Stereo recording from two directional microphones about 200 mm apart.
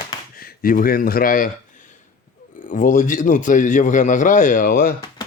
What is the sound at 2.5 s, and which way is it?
Speech, 45° left (ahead or behind).